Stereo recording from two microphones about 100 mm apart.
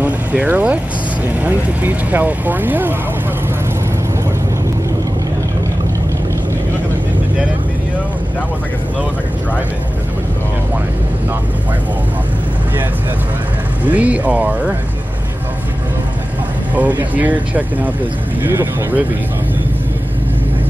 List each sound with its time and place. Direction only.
0.0 s vehicle: 15° right (ahead or behind)
1.4 s speech: 15° right (ahead or behind)
13.8 s speech: 15° right (ahead or behind)
16.7 s speech: 15° right (ahead or behind)